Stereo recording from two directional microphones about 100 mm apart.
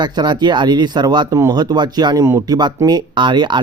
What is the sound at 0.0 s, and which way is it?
Speech, 45° right (ahead or behind).